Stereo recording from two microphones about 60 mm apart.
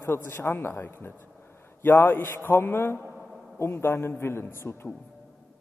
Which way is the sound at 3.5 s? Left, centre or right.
Left.